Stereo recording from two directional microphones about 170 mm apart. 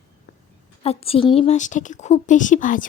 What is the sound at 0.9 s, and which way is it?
Speech, 35° left (ahead or behind).